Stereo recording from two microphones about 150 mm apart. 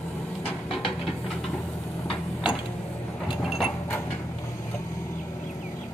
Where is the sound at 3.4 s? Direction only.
Centre (ahead or behind).